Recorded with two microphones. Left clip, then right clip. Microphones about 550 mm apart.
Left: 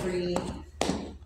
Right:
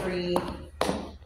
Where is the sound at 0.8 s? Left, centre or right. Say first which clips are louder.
Right 2 dB; right.